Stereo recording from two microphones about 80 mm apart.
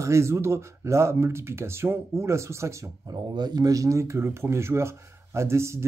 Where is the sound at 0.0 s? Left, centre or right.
Right.